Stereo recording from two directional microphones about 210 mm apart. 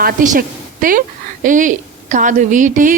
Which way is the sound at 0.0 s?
40° right (ahead or behind).